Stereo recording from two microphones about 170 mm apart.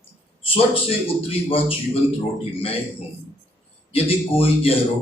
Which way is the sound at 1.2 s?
35° left (ahead or behind).